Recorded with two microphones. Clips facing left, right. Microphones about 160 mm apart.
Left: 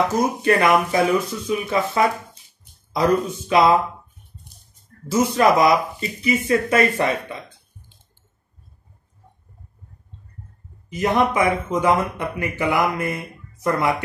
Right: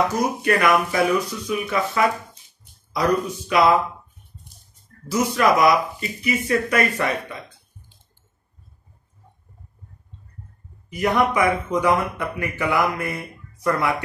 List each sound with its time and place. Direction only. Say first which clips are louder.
0.4 s speech: left 2 dB; 25° left (ahead or behind)
5.1 s speech: left 2 dB; 25° left (ahead or behind)
10.9 s speech: left 1 dB; 25° left (ahead or behind)